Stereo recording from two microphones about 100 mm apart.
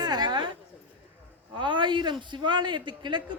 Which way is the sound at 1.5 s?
55° right (ahead or behind).